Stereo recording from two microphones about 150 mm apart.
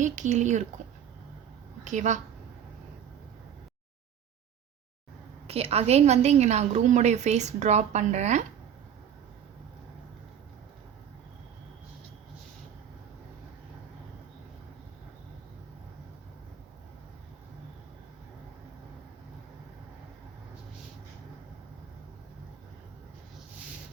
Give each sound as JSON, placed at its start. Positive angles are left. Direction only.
{"t": 0.0, "sound": "a woman's voice", "side_deg": -55}
{"t": 1.8, "sound": "a woman's voice", "side_deg": -55}
{"t": 5.5, "sound": "a woman's voice", "side_deg": -40}